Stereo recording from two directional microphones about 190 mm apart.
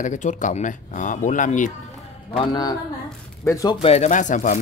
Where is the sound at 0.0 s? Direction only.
40° left (ahead or behind).